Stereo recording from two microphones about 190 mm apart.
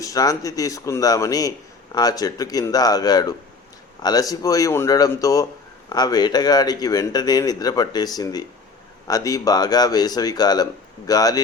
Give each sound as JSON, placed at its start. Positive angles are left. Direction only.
{"t": 0.0, "sound": "a man's voice", "side_deg": 20}